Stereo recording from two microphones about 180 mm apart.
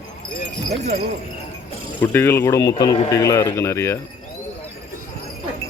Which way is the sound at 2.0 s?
10° left (ahead or behind).